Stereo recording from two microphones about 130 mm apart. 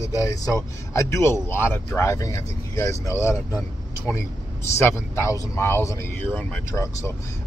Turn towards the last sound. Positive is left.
turn(degrees=25)  # may be behind; listen again after turning